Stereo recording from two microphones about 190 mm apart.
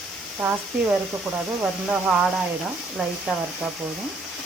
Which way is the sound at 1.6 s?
5° right (ahead or behind).